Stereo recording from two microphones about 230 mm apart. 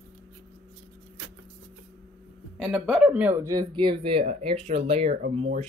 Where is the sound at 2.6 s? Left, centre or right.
Centre; by 5.1 s right.